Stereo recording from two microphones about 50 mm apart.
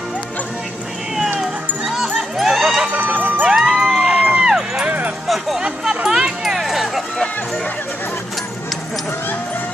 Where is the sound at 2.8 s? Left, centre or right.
Right.